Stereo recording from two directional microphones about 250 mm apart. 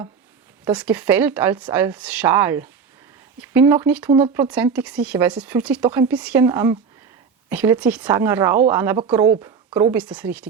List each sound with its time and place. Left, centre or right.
0.6 s a woman's voice: centre
9.9 s speech: centre